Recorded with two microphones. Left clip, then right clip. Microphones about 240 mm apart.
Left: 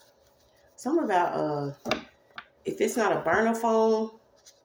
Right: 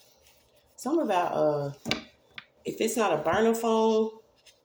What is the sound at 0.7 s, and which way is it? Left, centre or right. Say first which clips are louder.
Speech: left 1 dB; right.